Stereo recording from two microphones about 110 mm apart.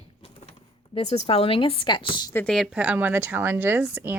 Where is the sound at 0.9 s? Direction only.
75° left (ahead or behind); by 2.3 s 45° left (ahead or behind).